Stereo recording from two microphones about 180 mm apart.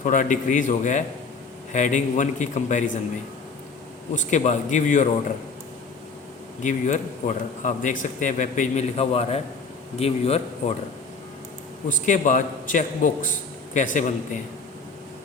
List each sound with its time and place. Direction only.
0.0 s a man's voice: 45° left (ahead or behind)
4.1 s a man's voice: 45° left (ahead or behind)
6.6 s a man's voice: 45° left (ahead or behind)
11.9 s a man's voice: 45° left (ahead or behind)